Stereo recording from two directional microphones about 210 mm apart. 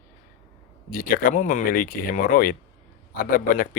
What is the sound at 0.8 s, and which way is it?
Speech, 40° left (ahead or behind).